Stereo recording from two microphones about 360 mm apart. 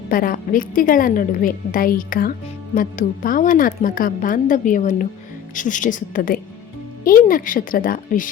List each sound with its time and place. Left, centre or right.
0.1 s speech: left